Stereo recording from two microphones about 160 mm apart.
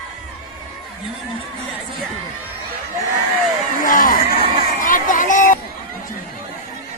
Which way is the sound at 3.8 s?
60° left (ahead or behind).